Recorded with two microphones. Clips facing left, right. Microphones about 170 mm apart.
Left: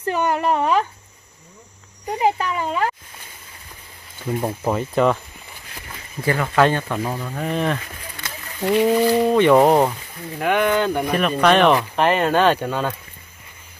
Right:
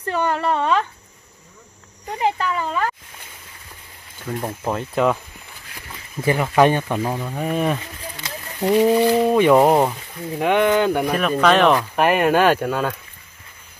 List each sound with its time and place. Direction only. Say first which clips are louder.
0.1 s speech: left 1 dB; 10° left (ahead or behind)
2.1 s speech: left 1 dB; 15° left (ahead or behind)
4.3 s speech: left 3 dB; 10° left (ahead or behind)
6.2 s speech: right 2 dB; 15° right (ahead or behind)
8.2 s a sound: right 2 dB; 15° right (ahead or behind)
8.7 s speech: right 1 dB; 10° right (ahead or behind)
10.4 s speech: right 2 dB; 20° right (ahead or behind)
10.9 s speech: right 1 dB; 5° right (ahead or behind)